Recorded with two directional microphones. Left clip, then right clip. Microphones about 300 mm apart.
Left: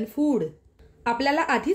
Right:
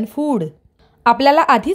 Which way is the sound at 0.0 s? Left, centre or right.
Right.